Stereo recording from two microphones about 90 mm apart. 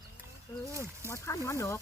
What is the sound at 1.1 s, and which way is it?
Speech, 30° left (ahead or behind).